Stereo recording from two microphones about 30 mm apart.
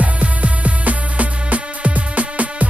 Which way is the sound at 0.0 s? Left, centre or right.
Right.